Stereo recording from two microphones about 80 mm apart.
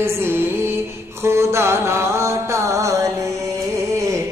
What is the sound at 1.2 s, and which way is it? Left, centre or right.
Music, right.